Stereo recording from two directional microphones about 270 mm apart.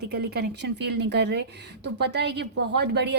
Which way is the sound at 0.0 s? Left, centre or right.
Right.